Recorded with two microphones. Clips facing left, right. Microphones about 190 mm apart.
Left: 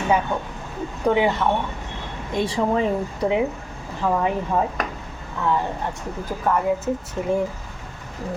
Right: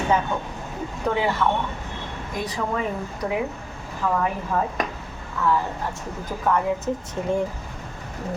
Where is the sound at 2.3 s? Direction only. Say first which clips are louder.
Left 6 dB; 30° left (ahead or behind).